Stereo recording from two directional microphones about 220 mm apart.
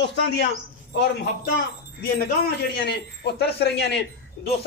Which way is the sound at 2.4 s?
45° left (ahead or behind).